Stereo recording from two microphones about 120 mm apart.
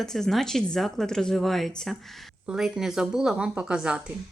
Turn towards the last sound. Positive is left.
turn(degrees=-5)  # may be behind; listen again after turning